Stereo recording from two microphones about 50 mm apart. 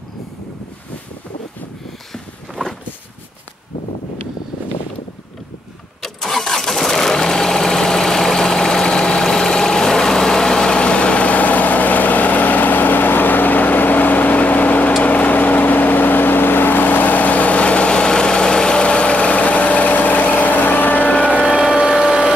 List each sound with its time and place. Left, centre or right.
6.0 s vehicle: centre; by 21.3 s left
21.7 s vehicle: centre